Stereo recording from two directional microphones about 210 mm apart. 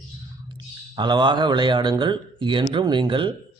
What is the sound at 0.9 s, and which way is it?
A man's voice, 20° right (ahead or behind).